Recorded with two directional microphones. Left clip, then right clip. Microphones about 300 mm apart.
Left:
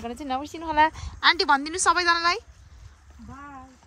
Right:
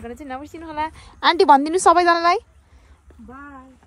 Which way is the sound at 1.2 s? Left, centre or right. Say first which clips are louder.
Right 6 dB; centre.